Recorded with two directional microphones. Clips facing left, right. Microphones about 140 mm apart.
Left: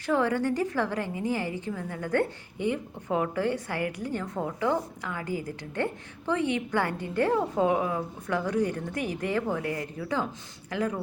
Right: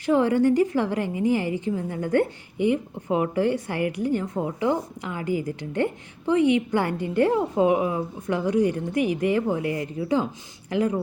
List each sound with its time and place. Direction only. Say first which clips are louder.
0.0 s a woman's voice: right 6 dB; 20° right (ahead or behind)